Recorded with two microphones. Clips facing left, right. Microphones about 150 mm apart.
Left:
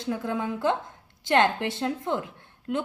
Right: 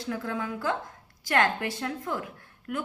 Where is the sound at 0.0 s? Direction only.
20° left (ahead or behind).